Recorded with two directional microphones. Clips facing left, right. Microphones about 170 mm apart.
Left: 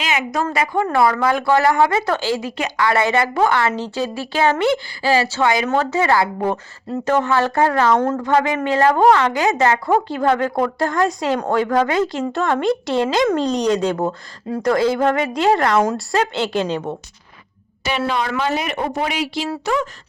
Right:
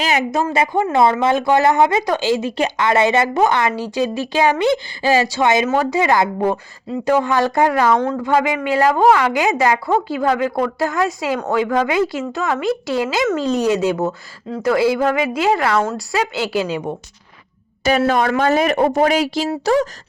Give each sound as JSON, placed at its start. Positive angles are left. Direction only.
{"t": 0.0, "sound": "speech", "side_deg": -35}
{"t": 0.5, "sound": "a woman's voice", "side_deg": -25}
{"t": 17.8, "sound": "speech", "side_deg": -45}
{"t": 19.6, "sound": "a sound", "side_deg": -40}